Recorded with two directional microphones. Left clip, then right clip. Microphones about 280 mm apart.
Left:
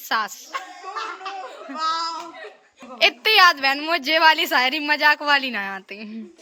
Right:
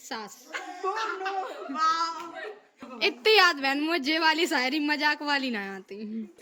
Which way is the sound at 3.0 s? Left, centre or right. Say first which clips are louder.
Left 6 dB; centre.